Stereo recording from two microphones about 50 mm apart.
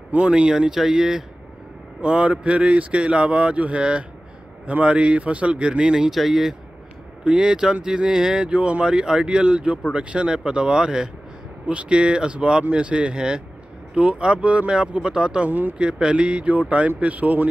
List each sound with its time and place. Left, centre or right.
0.3 s speech: centre
2.0 s speech: right
6.0 s speech: centre
7.2 s speech: centre; by 17.5 s right